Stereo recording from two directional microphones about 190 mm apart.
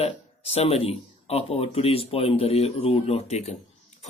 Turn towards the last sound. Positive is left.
turn(degrees=35)  # may be behind; listen again after turning